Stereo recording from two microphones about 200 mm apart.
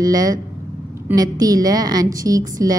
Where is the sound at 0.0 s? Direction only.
20° right (ahead or behind).